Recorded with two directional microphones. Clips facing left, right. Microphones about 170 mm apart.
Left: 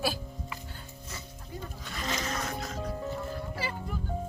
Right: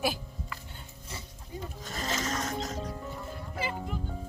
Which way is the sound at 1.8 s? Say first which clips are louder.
Right 1 dB; 40° right (ahead or behind).